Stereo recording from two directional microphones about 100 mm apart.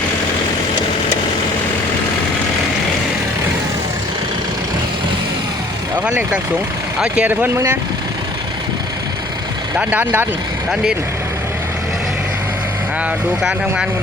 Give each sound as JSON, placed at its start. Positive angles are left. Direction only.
{"t": 6.1, "sound": "speech", "side_deg": -15}
{"t": 7.4, "sound": "speech", "side_deg": -25}
{"t": 9.7, "sound": "speech", "side_deg": -20}